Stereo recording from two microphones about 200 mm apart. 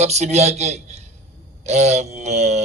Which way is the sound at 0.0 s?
35° right (ahead or behind).